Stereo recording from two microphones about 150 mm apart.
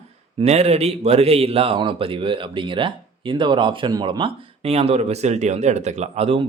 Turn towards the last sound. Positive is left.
turn(degrees=-40)  # may be behind; listen again after turning